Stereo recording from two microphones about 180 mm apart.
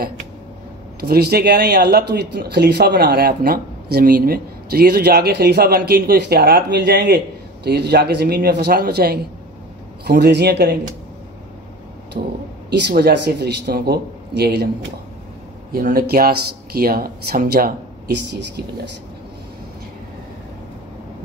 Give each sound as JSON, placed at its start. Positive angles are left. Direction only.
{"t": 1.0, "sound": "speech", "side_deg": -60}
{"t": 12.1, "sound": "speech", "side_deg": -50}
{"t": 12.6, "sound": "speech", "side_deg": -65}
{"t": 15.7, "sound": "speech", "side_deg": -55}